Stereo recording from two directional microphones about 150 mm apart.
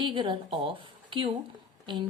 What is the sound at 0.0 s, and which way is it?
A woman's voice, 35° right (ahead or behind).